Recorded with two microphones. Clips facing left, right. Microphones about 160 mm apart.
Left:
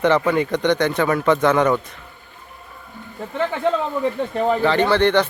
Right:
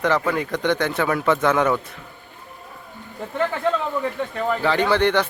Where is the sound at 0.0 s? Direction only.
Centre (ahead or behind).